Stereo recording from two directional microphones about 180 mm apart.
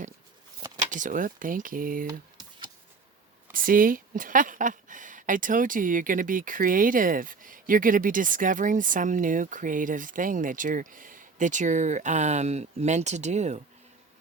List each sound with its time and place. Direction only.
0.9 s speech: 45° right (ahead or behind)
3.5 s speech: 50° right (ahead or behind)